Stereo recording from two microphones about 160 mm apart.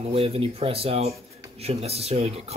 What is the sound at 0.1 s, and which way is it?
Speech, 35° right (ahead or behind).